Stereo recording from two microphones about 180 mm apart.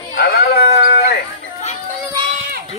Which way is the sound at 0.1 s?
60° left (ahead or behind).